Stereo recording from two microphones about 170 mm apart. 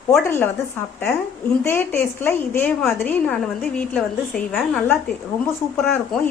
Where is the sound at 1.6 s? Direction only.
15° left (ahead or behind).